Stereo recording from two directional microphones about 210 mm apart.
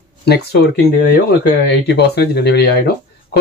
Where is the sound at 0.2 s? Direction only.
50° left (ahead or behind).